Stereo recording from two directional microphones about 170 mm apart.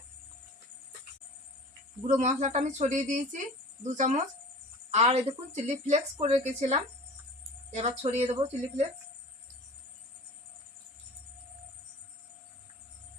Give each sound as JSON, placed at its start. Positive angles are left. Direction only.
{"t": 2.0, "sound": "a woman's voice", "side_deg": -45}